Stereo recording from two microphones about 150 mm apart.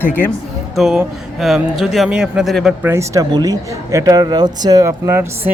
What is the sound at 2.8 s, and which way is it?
Speech, 20° right (ahead or behind).